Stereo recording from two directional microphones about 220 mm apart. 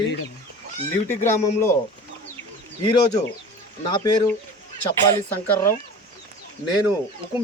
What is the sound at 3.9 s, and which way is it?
Speech, 20° left (ahead or behind).